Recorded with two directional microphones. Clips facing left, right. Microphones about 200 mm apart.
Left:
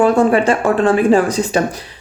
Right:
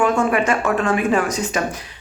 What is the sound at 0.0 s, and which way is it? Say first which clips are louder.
Speech: left 6 dB; 35° left (ahead or behind).